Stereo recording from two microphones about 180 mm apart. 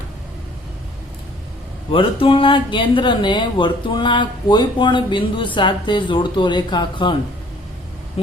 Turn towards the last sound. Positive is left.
turn(degrees=25)  # may be behind; listen again after turning